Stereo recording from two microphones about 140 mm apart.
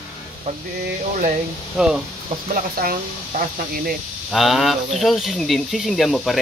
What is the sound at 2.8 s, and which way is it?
Speech, 90° right.